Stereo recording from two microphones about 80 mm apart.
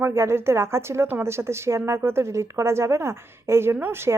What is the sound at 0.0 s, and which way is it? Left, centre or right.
A woman's voice, right.